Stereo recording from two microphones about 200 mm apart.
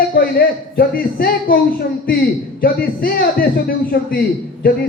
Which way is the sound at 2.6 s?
45° left (ahead or behind).